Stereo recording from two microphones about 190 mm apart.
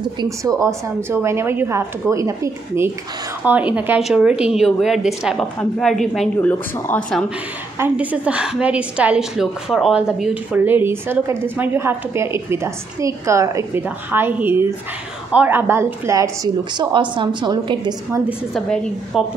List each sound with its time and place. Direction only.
0.0 s a woman's voice: 20° right (ahead or behind); by 7.2 s 5° left (ahead or behind)
7.8 s a woman's voice: 10° right (ahead or behind)
16.7 s a woman's voice: 25° right (ahead or behind)
18.5 s a woman's voice: centre (ahead or behind)